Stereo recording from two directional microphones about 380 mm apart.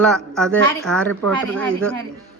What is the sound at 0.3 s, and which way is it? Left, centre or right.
A woman's voice, centre.